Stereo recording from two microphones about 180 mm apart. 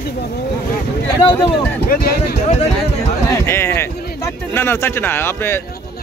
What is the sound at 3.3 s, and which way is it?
Speech, 15° left (ahead or behind).